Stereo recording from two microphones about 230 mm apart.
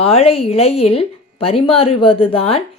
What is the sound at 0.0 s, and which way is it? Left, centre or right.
A woman's voice, left.